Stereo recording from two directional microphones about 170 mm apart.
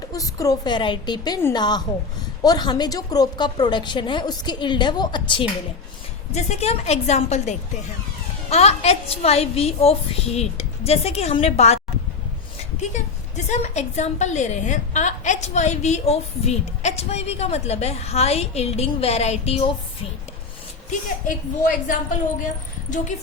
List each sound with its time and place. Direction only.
0.1 s a woman's voice: 20° left (ahead or behind)
6.3 s a woman's voice: 40° left (ahead or behind)
12.8 s a woman's voice: 45° left (ahead or behind)
21.2 s a woman's voice: 50° left (ahead or behind)